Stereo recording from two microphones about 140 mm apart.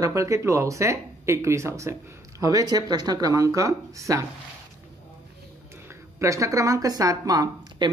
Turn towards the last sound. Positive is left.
turn(degrees=-25)  # may be behind; listen again after turning